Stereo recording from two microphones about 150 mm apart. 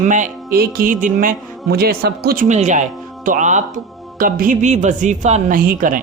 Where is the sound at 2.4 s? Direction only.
50° right (ahead or behind).